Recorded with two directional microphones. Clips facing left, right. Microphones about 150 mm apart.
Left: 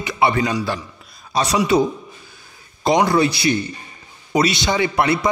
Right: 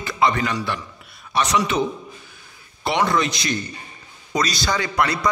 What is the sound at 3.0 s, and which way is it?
A man's voice, 30° left (ahead or behind).